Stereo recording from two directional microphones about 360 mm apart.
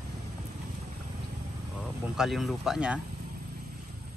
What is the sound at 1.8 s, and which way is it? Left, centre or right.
Speech, centre.